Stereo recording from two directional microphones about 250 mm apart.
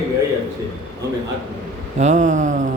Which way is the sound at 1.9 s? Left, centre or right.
Right.